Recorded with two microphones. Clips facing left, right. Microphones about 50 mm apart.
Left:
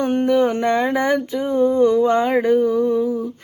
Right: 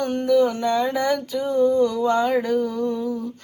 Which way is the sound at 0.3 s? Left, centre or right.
Left.